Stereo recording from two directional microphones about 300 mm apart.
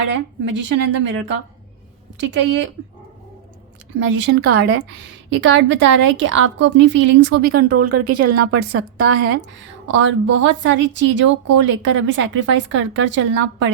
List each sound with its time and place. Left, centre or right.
0.1 s a woman's voice: right
3.9 s a woman's voice: right
7.8 s speech: right
8.4 s a woman's voice: right
9.8 s a woman's voice: right